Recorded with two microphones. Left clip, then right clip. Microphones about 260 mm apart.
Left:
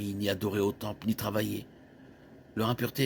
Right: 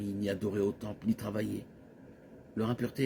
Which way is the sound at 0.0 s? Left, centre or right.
Left.